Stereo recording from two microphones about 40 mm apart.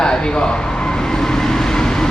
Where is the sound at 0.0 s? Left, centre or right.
Centre.